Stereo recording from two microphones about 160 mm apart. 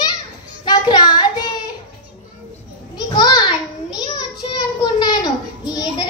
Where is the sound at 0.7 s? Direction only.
25° left (ahead or behind).